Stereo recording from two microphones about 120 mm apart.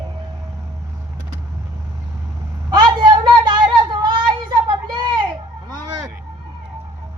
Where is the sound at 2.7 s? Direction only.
40° right (ahead or behind).